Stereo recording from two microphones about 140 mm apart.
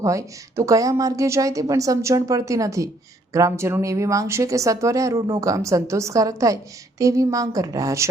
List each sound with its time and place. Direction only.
0.0 s a woman's voice: 20° right (ahead or behind)